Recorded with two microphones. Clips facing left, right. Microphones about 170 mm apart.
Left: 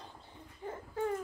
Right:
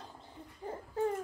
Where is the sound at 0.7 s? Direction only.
35° right (ahead or behind).